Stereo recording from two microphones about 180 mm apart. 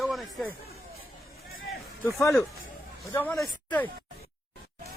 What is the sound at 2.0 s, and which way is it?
Speech, 15° left (ahead or behind).